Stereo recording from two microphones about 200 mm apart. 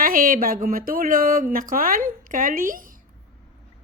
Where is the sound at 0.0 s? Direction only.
45° right (ahead or behind).